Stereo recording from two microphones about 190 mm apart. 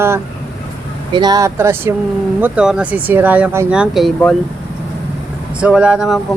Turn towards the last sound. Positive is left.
turn(degrees=-5)  # may be behind; listen again after turning